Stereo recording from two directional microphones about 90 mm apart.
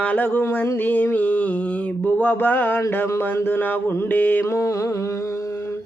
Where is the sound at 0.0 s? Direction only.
20° left (ahead or behind).